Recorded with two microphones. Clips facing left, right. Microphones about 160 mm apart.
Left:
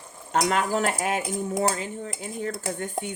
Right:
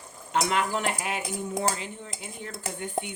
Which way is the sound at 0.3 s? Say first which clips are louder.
Left 3 dB; 45° left (ahead or behind).